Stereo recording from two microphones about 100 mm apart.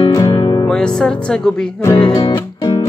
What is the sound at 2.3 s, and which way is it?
Music, 45° left (ahead or behind).